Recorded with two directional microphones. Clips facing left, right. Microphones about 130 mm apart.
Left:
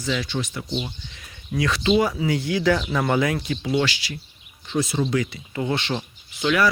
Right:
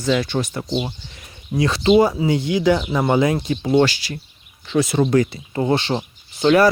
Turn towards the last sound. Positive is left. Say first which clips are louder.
# right 7 dB
turn(degrees=-40)  # may be behind; listen again after turning